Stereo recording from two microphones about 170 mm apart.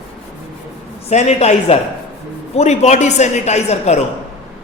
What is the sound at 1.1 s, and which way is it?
A man's voice, 40° left (ahead or behind).